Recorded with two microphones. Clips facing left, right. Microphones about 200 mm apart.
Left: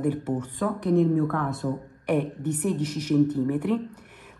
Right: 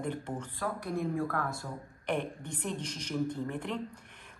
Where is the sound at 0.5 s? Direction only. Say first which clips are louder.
Left 12 dB; 20° left (ahead or behind).